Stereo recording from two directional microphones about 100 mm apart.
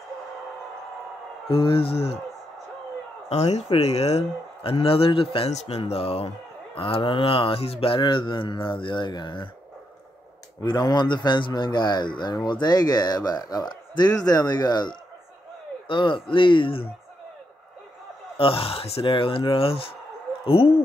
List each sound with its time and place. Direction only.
1.5 s a man's voice: 65° left (ahead or behind)
3.3 s speech: 90° left
4.6 s a man's voice: 70° left (ahead or behind)
6.8 s speech: 60° left (ahead or behind)
10.6 s speech: 45° left (ahead or behind)
18.4 s a man's voice: 70° left (ahead or behind)